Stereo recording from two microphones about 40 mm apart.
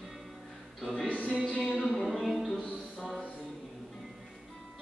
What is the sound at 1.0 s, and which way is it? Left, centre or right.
Music, left.